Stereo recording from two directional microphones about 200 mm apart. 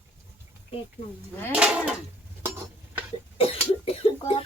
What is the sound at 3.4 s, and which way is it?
Cough, 30° left (ahead or behind).